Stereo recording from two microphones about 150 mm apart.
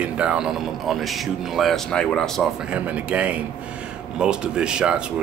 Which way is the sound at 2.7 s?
10° right (ahead or behind).